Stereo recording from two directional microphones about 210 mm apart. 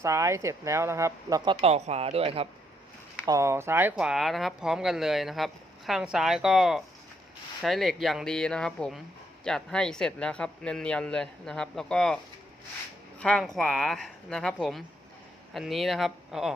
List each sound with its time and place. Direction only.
0.0 s speech: 15° right (ahead or behind)
1.6 s speech: 30° right (ahead or behind)
3.2 s speech: 15° right (ahead or behind)